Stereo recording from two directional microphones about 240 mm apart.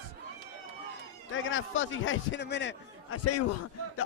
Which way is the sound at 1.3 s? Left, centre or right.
Left.